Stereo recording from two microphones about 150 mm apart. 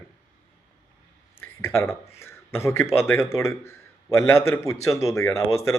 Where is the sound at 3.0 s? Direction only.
15° left (ahead or behind).